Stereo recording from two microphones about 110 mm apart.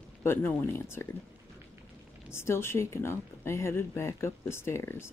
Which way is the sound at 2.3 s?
25° left (ahead or behind).